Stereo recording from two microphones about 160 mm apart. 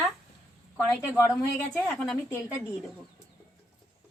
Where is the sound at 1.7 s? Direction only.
10° left (ahead or behind).